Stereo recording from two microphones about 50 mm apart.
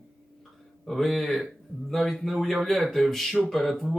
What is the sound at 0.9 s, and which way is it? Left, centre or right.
Speech, centre.